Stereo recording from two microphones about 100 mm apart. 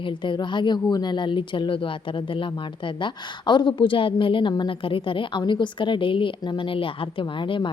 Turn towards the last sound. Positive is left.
turn(degrees=55)  # may be behind; listen again after turning